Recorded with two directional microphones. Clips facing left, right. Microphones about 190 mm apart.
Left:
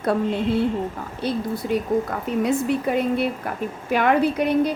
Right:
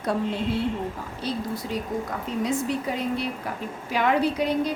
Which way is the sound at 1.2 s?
60° left (ahead or behind).